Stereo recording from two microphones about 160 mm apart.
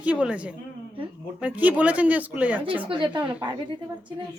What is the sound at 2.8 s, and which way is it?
Speech, 30° right (ahead or behind).